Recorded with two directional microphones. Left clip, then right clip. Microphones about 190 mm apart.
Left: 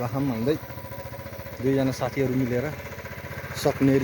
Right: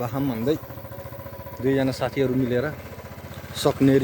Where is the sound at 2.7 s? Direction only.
50° left (ahead or behind).